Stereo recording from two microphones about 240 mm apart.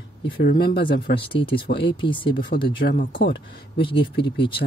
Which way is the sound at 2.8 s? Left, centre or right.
Left.